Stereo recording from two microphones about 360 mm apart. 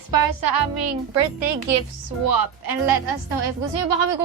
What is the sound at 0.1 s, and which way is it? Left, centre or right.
Speech, right.